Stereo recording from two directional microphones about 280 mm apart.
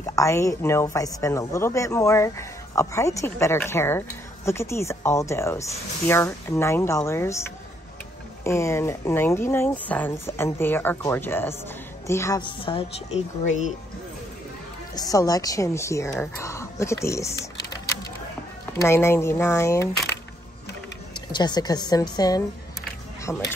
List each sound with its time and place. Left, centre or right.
0.0 s speech: centre
8.5 s speech: centre; by 13.7 s left
15.0 s a woman's voice: centre
21.1 s speech: centre